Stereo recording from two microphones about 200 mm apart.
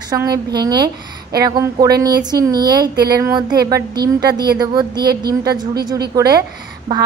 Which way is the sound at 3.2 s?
20° right (ahead or behind).